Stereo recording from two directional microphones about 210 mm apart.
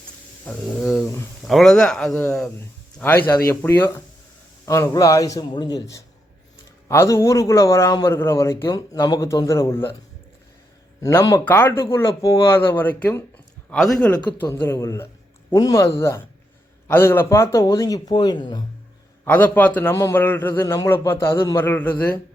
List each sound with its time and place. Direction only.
0.4 s a man's voice: centre (ahead or behind)
11.0 s a man's voice: 15° left (ahead or behind)
14.3 s a man's voice: 10° left (ahead or behind)
19.2 s a man's voice: 10° left (ahead or behind)